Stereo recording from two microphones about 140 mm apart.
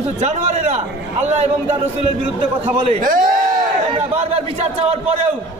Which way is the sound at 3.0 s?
80° right.